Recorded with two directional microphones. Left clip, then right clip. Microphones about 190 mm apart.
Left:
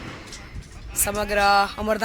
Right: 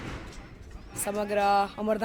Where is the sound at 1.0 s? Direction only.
10° left (ahead or behind).